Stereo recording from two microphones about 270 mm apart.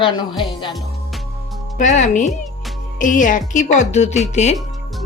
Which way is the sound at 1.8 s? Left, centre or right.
Left.